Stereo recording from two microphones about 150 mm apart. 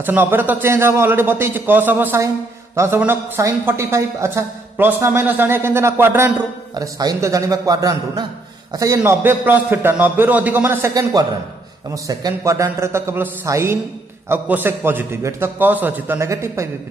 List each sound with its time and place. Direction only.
0.0 s a man's voice: 15° right (ahead or behind)
6.7 s a man's voice: 25° right (ahead or behind)